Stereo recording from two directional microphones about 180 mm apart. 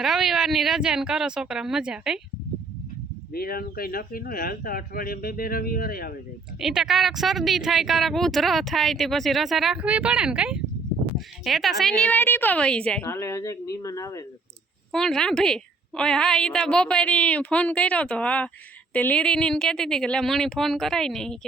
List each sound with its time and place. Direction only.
0.0 s speech: centre (ahead or behind)
3.3 s speech: 55° left (ahead or behind)
6.6 s a woman's voice: centre (ahead or behind); by 14.3 s 20° left (ahead or behind)
14.9 s speech: 5° left (ahead or behind)